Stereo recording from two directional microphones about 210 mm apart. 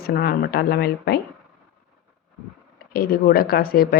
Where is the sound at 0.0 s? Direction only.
45° left (ahead or behind).